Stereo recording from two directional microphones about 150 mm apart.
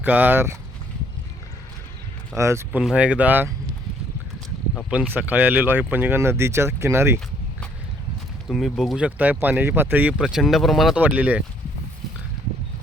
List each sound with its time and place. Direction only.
0.0 s speech: 10° right (ahead or behind)
2.4 s speech: 20° right (ahead or behind)
2.8 s speech: 5° right (ahead or behind)
4.9 s speech: 10° right (ahead or behind)
8.4 s speech: centre (ahead or behind)